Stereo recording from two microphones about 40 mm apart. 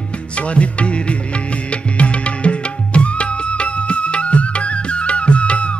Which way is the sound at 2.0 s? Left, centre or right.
Left.